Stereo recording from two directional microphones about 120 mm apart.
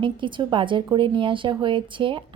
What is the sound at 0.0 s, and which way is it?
A woman's voice, 45° right (ahead or behind).